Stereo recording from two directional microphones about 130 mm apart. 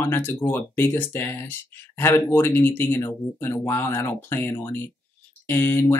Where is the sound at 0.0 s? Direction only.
15° left (ahead or behind).